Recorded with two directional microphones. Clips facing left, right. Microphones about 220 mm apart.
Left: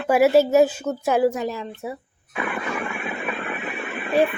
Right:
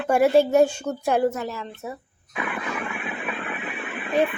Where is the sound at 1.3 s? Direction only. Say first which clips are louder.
Left 3 dB; 15° left (ahead or behind).